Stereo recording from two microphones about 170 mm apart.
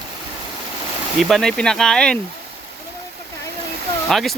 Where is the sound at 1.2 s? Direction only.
Centre (ahead or behind).